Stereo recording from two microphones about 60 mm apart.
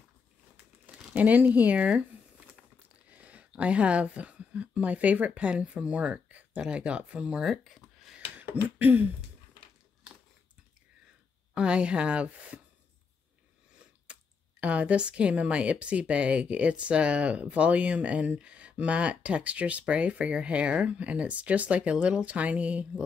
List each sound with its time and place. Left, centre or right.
1.1 s a woman's voice: right
7.4 s a sound: centre
8.7 s a woman's voice: right
11.5 s a woman's voice: centre
14.1 s clicking: centre
14.6 s a woman's voice: right